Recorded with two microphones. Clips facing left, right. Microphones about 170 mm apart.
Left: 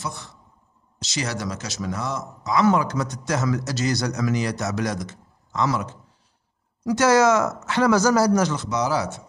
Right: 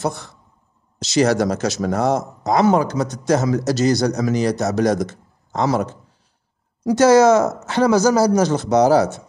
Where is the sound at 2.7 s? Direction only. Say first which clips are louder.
Right 5 dB; 35° right (ahead or behind).